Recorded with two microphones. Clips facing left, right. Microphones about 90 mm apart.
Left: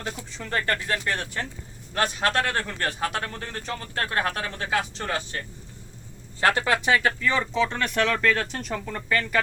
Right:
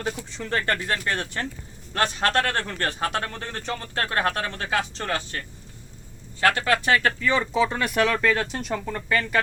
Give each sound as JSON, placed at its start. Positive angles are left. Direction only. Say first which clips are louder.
{"t": 0.3, "sound": "speech", "louder": "left 1 dB", "side_deg": 0}
{"t": 6.4, "sound": "speech", "louder": "right 1 dB", "side_deg": 20}
{"t": 6.9, "sound": "speech", "louder": "right 1 dB", "side_deg": 0}